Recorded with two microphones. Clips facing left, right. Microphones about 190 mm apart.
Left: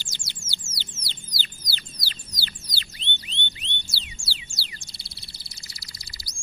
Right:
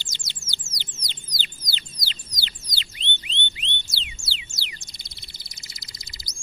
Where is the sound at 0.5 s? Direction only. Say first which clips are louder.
Even; 15° right (ahead or behind).